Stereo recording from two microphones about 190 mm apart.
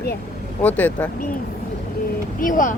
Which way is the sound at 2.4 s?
45° left (ahead or behind).